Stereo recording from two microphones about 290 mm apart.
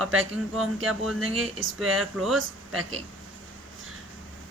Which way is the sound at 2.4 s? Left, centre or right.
Right.